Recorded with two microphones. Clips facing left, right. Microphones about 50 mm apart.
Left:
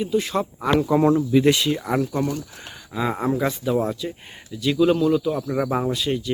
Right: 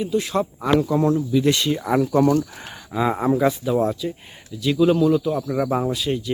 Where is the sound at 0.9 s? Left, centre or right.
Left.